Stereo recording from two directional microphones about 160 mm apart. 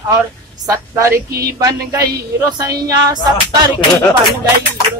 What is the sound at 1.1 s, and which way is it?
Speech, 75° right (ahead or behind).